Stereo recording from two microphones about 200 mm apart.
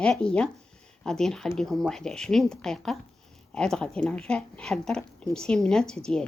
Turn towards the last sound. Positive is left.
turn(degrees=5)  # may be behind; listen again after turning